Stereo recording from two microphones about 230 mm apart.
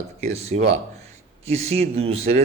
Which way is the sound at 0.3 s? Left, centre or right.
Right.